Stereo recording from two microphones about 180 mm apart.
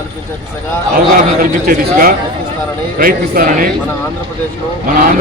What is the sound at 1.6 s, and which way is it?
A man's voice, 55° right (ahead or behind).